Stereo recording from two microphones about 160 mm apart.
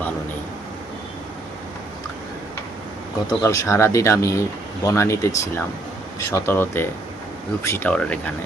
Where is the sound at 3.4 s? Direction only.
20° left (ahead or behind).